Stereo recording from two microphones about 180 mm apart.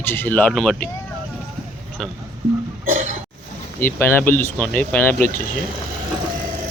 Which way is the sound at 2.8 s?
50° right (ahead or behind).